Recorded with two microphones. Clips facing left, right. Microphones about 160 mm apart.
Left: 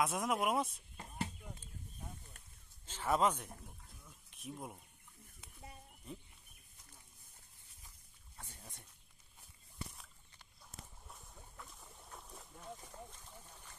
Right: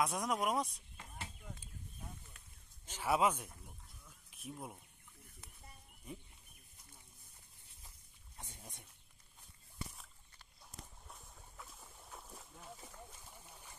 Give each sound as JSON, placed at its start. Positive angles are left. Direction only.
{"t": 0.0, "sound": "speech", "side_deg": 0}
{"t": 0.9, "sound": "a sound", "side_deg": 35}
{"t": 2.9, "sound": "speech", "side_deg": -10}
{"t": 4.0, "sound": "a sound", "side_deg": 0}
{"t": 8.4, "sound": "dog", "side_deg": -15}
{"t": 11.1, "sound": "boat", "side_deg": 0}